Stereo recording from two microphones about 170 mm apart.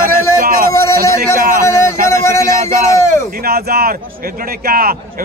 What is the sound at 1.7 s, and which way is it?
Speech, 15° left (ahead or behind).